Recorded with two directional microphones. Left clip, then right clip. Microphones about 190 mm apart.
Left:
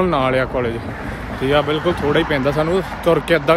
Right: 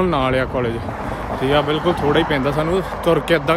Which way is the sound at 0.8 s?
25° right (ahead or behind).